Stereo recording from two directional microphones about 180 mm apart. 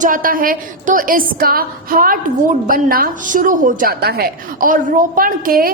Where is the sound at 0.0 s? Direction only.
50° right (ahead or behind).